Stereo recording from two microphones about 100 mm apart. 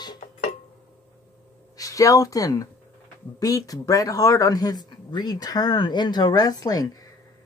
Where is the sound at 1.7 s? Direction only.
35° left (ahead or behind).